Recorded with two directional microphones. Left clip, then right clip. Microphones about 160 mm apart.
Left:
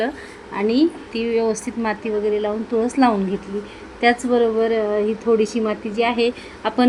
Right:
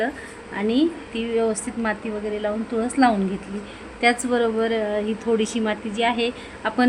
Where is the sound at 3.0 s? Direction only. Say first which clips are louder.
Left 1 dB; 20° left (ahead or behind).